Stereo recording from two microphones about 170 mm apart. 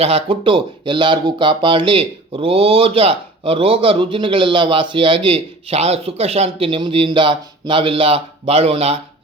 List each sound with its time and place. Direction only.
0.0 s speech: 35° right (ahead or behind)